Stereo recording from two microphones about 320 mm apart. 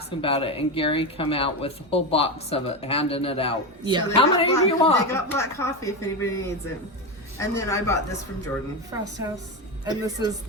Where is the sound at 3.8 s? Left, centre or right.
Centre.